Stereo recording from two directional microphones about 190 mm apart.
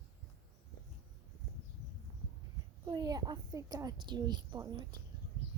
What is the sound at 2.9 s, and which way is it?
A woman's voice, 20° right (ahead or behind).